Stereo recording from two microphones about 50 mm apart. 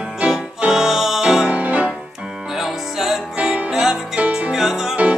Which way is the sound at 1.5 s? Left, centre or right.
Right.